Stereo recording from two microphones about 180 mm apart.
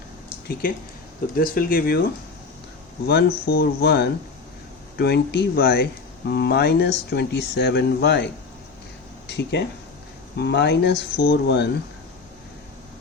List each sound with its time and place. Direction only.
1.4 s speech: 55° left (ahead or behind)
3.1 s speech: 60° left (ahead or behind)
9.2 s speech: 65° left (ahead or behind)